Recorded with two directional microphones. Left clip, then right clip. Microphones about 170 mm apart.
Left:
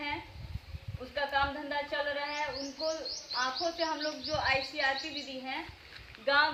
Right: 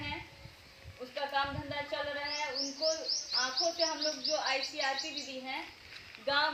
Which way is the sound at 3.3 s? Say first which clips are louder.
Left 1 dB; 20° right (ahead or behind).